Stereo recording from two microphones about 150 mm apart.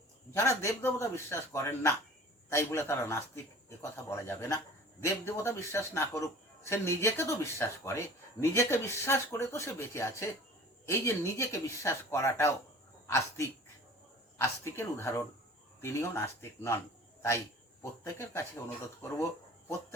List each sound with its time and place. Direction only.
0.3 s speech: 20° left (ahead or behind)
18.0 s speech: 20° left (ahead or behind)